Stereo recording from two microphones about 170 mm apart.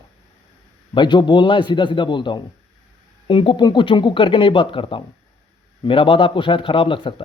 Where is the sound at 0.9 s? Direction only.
25° left (ahead or behind).